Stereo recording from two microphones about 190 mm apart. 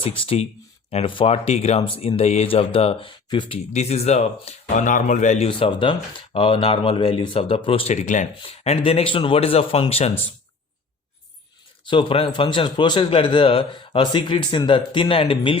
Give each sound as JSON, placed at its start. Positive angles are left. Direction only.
{"t": 0.9, "sound": "speech", "side_deg": 30}
{"t": 11.9, "sound": "a man's voice", "side_deg": 25}